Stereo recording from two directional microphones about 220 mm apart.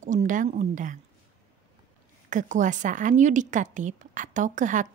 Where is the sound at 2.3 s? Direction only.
35° right (ahead or behind).